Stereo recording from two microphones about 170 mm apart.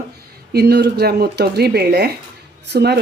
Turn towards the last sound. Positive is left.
turn(degrees=-75)  # may be behind; listen again after turning